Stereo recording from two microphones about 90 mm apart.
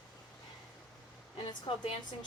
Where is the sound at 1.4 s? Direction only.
70° left (ahead or behind).